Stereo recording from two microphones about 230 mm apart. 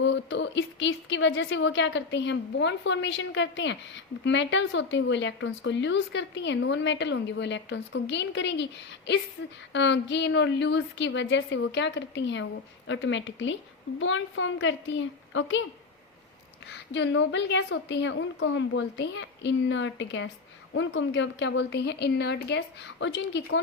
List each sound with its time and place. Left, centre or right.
0.0 s a woman's voice: left
16.9 s a woman's voice: left